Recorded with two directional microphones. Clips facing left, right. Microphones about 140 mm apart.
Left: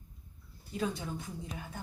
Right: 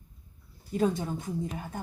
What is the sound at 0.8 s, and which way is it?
Speech, 45° right (ahead or behind).